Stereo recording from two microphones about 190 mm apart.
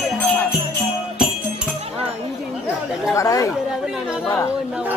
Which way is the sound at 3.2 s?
15° left (ahead or behind).